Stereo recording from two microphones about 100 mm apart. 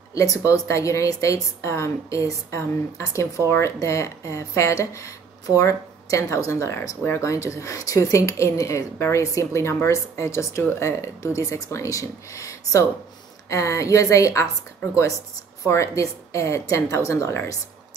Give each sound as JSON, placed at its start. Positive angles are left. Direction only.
{"t": 0.1, "sound": "a woman's voice", "side_deg": 35}
{"t": 15.6, "sound": "speech", "side_deg": 30}